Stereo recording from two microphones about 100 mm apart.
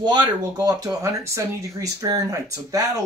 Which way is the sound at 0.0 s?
45° right (ahead or behind).